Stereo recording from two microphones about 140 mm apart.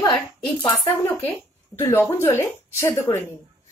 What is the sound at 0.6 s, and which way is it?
A woman's voice, 15° left (ahead or behind).